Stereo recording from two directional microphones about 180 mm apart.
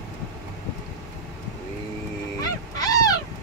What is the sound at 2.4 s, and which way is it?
Goose, 20° left (ahead or behind).